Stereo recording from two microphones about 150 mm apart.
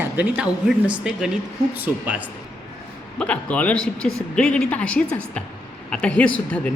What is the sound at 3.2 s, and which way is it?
Speech, 10° left (ahead or behind).